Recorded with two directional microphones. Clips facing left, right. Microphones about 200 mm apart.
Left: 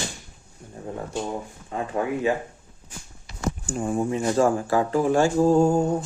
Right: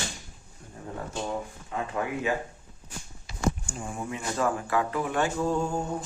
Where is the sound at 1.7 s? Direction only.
30° left (ahead or behind).